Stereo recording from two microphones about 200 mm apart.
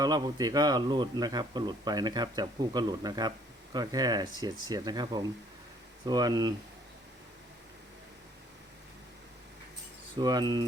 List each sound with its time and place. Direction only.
0.0 s a man's voice: 20° right (ahead or behind)
10.2 s a man's voice: 20° right (ahead or behind)